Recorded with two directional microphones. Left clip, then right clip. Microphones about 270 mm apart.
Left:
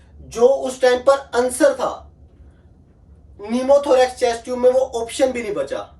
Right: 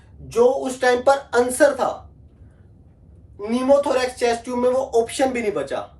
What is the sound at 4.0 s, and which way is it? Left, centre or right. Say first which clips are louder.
Speech: left 4 dB; centre.